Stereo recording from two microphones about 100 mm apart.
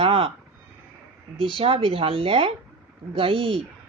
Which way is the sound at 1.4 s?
65° right (ahead or behind).